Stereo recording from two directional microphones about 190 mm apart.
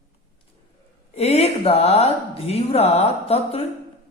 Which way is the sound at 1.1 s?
30° left (ahead or behind).